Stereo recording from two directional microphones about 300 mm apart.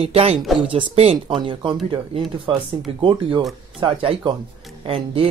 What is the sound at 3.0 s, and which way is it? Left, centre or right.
Speech, centre.